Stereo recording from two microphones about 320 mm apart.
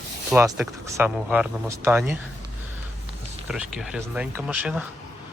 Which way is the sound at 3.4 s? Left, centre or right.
Centre.